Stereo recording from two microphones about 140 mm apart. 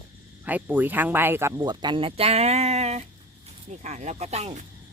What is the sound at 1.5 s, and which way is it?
Speech, 30° right (ahead or behind).